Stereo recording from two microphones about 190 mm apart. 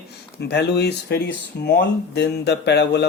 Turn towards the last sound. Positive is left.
turn(degrees=65)  # may be behind; listen again after turning